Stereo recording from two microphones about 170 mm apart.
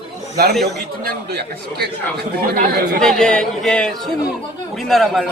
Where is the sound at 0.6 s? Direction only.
70° right (ahead or behind).